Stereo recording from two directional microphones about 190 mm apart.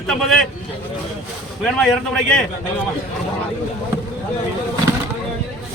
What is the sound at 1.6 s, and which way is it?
Speech, 5° left (ahead or behind).